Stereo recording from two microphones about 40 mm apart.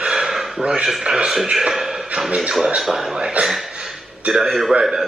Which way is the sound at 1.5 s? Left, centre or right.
Centre.